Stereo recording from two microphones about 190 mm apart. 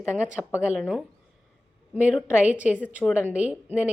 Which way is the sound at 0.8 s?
Centre (ahead or behind).